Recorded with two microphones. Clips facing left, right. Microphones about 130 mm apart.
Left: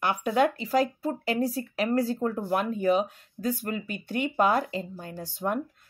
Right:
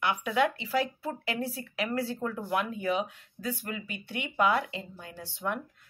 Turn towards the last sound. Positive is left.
turn(degrees=40)  # may be behind; listen again after turning